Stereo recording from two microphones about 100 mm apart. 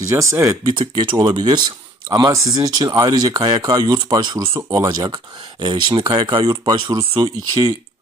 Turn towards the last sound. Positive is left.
turn(degrees=-40)  # may be behind; listen again after turning